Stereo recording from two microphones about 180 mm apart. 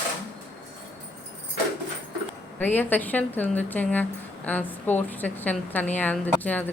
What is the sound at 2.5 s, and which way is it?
A woman's voice, 10° left (ahead or behind).